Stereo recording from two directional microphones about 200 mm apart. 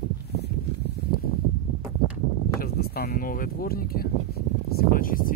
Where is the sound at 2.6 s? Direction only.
50° left (ahead or behind).